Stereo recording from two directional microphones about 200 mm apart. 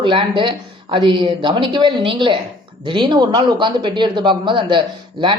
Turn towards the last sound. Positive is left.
turn(degrees=-25)  # may be behind; listen again after turning